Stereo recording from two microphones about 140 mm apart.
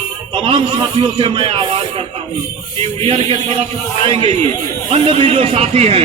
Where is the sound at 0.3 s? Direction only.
40° right (ahead or behind).